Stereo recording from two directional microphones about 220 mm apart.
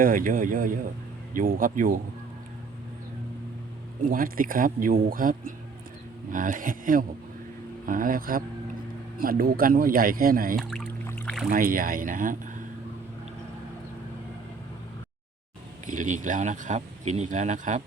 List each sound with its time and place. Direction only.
0.0 s speech: 40° right (ahead or behind)
4.1 s speech: 40° right (ahead or behind)
10.6 s boat: 5° left (ahead or behind)
11.4 s speech: 40° right (ahead or behind)
15.9 s speech: 35° right (ahead or behind)